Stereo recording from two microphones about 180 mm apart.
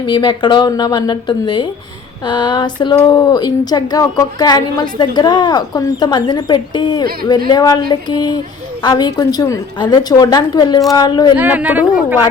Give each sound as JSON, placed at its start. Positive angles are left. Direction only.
{"t": 0.0, "sound": "a woman's voice", "side_deg": 25}
{"t": 11.3, "sound": "speech", "side_deg": -10}